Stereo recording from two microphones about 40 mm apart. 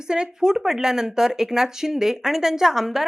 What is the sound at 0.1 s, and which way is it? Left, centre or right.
Speech, right.